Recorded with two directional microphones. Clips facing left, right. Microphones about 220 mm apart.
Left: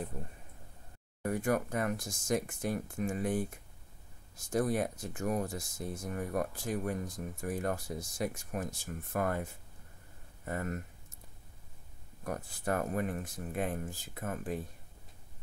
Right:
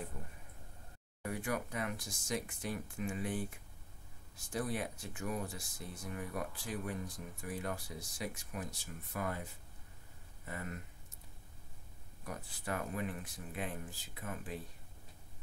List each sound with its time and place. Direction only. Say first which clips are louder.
1.2 s speech: left 7 dB; 45° left (ahead or behind)
12.2 s speech: left 7 dB; 50° left (ahead or behind)